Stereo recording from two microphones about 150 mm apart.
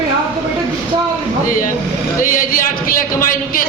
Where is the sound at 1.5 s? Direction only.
65° left (ahead or behind).